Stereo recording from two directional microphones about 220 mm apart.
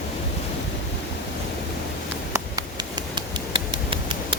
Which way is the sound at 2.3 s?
15° right (ahead or behind).